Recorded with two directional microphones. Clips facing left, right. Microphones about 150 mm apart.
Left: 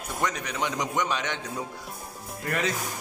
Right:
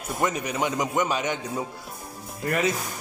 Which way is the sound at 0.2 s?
5° right (ahead or behind).